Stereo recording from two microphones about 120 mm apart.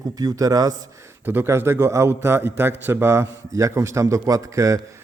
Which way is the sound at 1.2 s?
15° right (ahead or behind).